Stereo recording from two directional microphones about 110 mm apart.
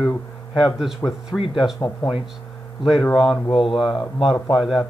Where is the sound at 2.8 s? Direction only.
Centre (ahead or behind).